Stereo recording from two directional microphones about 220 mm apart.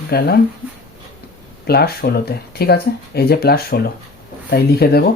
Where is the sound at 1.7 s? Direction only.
45° left (ahead or behind).